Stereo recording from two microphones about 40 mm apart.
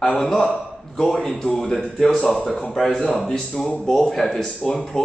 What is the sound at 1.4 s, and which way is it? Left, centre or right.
A man's voice, centre.